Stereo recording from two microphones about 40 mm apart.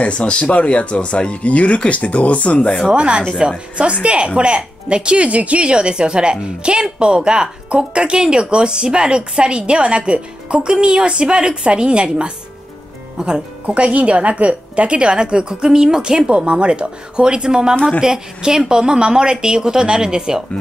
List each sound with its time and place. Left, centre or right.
0.0 s speech: left
2.9 s a woman's voice: right